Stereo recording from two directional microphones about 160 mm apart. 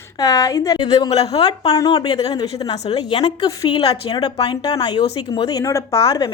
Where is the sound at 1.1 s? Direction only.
40° left (ahead or behind).